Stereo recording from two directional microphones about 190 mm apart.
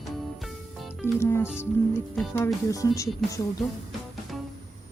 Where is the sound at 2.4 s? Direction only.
15° left (ahead or behind).